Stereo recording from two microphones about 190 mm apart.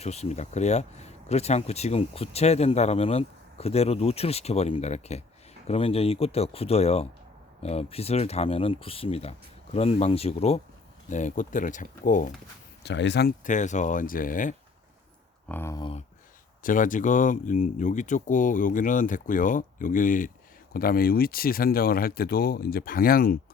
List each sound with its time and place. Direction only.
0.0 s speech: 35° left (ahead or behind)
12.8 s speech: 70° left (ahead or behind)
13.4 s speech: 40° left (ahead or behind)
15.4 s speech: 10° left (ahead or behind)
15.8 s speech: 30° left (ahead or behind)
16.6 s speech: 45° left (ahead or behind)